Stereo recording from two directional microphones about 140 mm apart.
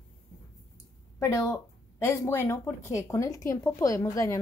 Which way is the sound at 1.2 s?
20° left (ahead or behind).